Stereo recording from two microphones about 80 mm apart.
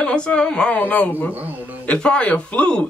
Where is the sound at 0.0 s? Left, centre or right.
Centre.